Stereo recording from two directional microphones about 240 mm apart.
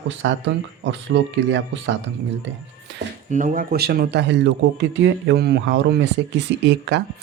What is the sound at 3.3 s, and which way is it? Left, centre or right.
Speech, right.